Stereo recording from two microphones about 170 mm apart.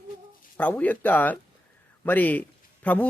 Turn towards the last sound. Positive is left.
turn(degrees=10)  # may be behind; listen again after turning